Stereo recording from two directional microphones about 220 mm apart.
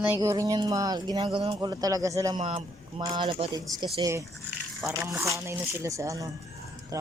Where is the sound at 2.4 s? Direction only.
25° right (ahead or behind).